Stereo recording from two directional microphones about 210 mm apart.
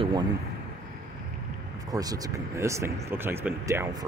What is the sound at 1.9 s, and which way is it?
Speech, 15° right (ahead or behind).